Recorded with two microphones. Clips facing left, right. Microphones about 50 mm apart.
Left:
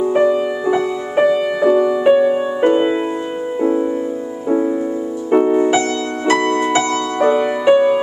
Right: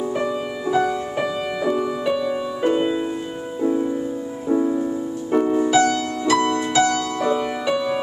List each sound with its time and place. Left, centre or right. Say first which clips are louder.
0.0 s music: left 9 dB; left
4.5 s music: left 3 dB; left